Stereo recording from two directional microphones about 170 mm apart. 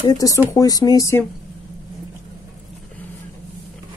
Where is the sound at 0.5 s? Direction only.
20° left (ahead or behind).